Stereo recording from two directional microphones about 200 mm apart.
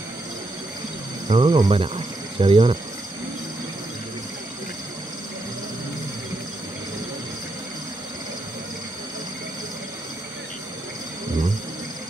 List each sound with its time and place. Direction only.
1.3 s speech: 25° right (ahead or behind)